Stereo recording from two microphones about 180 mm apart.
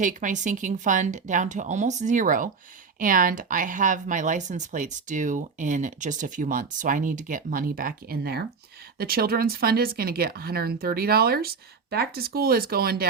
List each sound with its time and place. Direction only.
0.0 s speech: 45° right (ahead or behind)